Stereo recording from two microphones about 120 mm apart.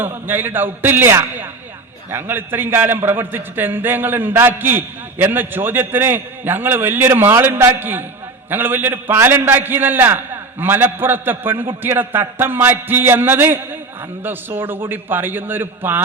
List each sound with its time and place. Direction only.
0.0 s a man's voice: 15° right (ahead or behind)